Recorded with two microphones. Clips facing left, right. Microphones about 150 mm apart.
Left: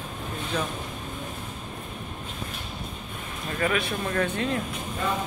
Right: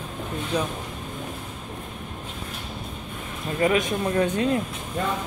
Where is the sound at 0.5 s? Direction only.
15° right (ahead or behind).